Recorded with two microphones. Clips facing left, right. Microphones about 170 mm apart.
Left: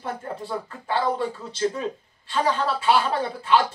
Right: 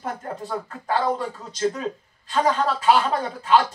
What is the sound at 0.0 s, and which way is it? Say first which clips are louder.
A woman's voice: right 1 dB; 40° right (ahead or behind).